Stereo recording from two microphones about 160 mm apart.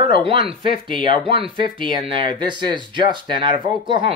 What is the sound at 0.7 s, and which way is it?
Speech, 60° left (ahead or behind).